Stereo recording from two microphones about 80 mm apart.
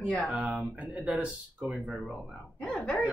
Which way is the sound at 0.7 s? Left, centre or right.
Centre.